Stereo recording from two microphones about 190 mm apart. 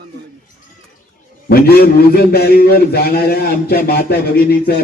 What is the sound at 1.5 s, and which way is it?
A man's voice, 55° left (ahead or behind).